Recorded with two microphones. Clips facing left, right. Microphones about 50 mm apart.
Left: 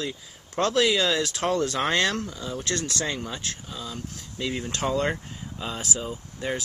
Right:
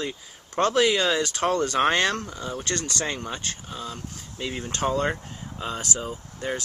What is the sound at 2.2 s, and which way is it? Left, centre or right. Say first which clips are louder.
Speech: even; right.